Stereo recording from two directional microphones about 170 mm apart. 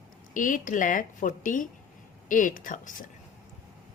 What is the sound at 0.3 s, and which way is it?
A woman's voice, 50° left (ahead or behind).